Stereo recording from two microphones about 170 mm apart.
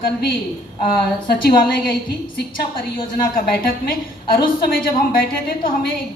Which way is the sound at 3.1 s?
60° left (ahead or behind).